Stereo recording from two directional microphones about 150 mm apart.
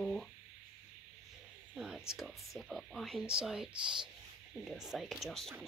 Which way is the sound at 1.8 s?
5° right (ahead or behind).